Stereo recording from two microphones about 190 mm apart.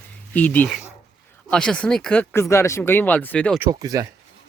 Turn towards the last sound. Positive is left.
turn(degrees=-20)  # may be behind; listen again after turning